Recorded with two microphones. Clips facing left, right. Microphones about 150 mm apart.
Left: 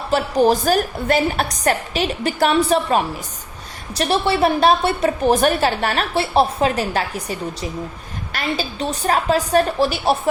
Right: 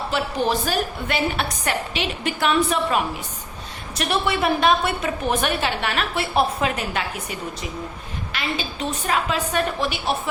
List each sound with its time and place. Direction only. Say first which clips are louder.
0.1 s a woman's voice: left 8 dB; 40° left (ahead or behind)